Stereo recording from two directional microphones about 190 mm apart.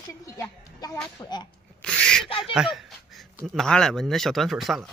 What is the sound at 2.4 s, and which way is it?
Speech, 5° right (ahead or behind).